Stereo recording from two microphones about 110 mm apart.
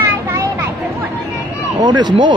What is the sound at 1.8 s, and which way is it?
Speech, 40° right (ahead or behind).